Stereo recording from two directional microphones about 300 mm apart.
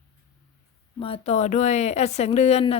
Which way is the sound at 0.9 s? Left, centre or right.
Centre.